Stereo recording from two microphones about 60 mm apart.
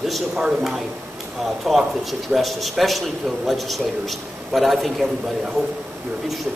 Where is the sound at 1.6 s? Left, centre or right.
Centre.